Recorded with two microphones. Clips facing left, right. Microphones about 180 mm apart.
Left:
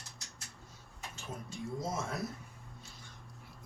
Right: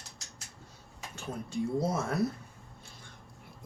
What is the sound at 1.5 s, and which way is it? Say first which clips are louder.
Speech: right 8 dB; 60° right (ahead or behind).